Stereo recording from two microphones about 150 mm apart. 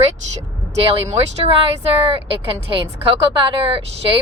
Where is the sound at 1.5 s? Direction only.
40° right (ahead or behind).